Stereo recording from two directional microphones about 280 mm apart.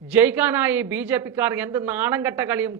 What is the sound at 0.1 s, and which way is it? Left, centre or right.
A man's voice, centre.